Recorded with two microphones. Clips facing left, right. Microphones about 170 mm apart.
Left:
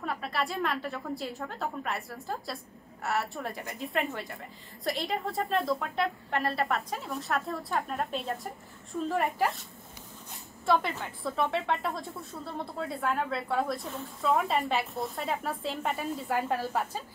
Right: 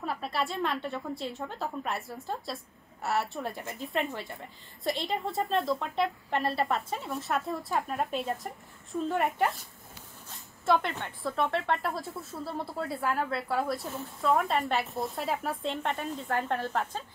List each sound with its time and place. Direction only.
0.0 s a woman's voice: centre (ahead or behind)
10.6 s a woman's voice: centre (ahead or behind)